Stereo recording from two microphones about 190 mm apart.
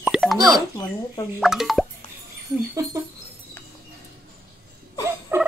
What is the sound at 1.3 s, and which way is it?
Speech, centre (ahead or behind).